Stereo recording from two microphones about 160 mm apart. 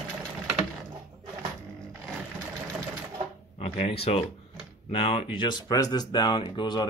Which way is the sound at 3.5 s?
40° left (ahead or behind).